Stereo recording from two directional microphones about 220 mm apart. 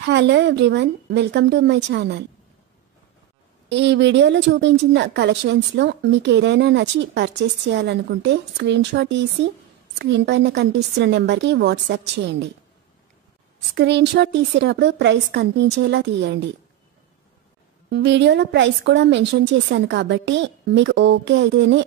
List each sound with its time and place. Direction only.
0.0 s a woman's voice: 50° right (ahead or behind)
3.6 s a woman's voice: 55° right (ahead or behind)
13.7 s a woman's voice: 50° right (ahead or behind)
17.8 s a woman's voice: 50° right (ahead or behind)